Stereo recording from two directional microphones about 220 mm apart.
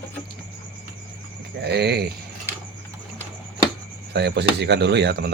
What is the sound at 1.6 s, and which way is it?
Speech, 50° right (ahead or behind).